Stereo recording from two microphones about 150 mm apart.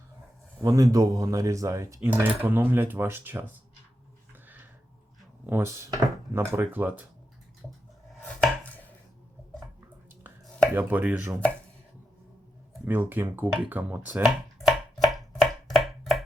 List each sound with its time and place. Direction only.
0.6 s a man's voice: 25° right (ahead or behind)
5.5 s speech: 15° right (ahead or behind)
8.2 s chopping: 10° left (ahead or behind)
10.8 s speech: 10° right (ahead or behind)
12.8 s speech: 15° right (ahead or behind)
14.9 s chopping: centre (ahead or behind)